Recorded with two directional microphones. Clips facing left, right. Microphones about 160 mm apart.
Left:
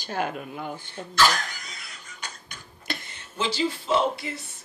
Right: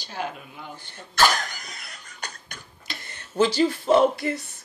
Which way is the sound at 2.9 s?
55° left (ahead or behind).